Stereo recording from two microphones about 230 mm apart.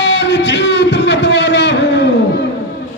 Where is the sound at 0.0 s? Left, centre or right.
Left.